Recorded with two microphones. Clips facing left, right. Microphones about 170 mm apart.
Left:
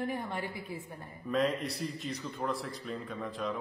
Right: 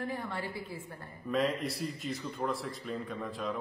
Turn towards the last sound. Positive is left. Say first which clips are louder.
# even
turn(degrees=0)  # may be behind; listen again after turning